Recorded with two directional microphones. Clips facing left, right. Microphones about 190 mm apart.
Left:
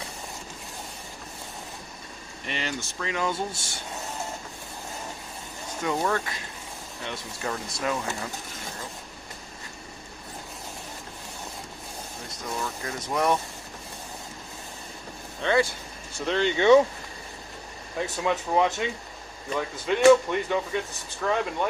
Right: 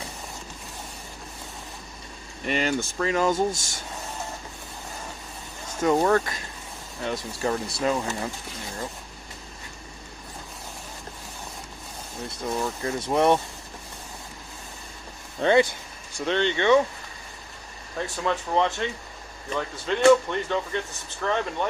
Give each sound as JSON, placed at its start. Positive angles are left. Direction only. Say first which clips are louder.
{"t": 2.5, "sound": "speech", "louder": "right 7 dB", "side_deg": -45}
{"t": 5.8, "sound": "speech", "louder": "right 6 dB", "side_deg": -40}
{"t": 12.6, "sound": "speech", "louder": "right 5 dB", "side_deg": -30}
{"t": 15.4, "sound": "speech", "louder": "right 5 dB", "side_deg": -50}
{"t": 16.2, "sound": "speech", "louder": "left 1 dB", "side_deg": 5}
{"t": 17.9, "sound": "speech", "louder": "even", "side_deg": 10}